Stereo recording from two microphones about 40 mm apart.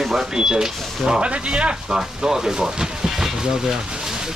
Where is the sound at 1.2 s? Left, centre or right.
Right.